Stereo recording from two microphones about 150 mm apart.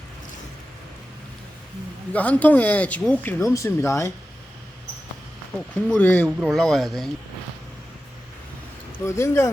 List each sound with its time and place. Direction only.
2.1 s speech: 10° left (ahead or behind)
3.4 s speech: 20° left (ahead or behind)
5.7 s speech: 10° left (ahead or behind)
9.0 s speech: 20° left (ahead or behind)